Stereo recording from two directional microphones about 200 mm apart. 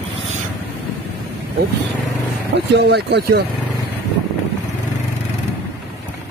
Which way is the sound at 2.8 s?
55° right (ahead or behind).